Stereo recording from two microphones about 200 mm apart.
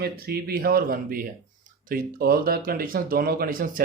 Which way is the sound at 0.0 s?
50° right (ahead or behind).